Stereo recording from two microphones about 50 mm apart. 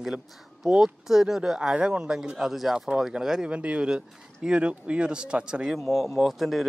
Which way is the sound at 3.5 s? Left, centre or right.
Right.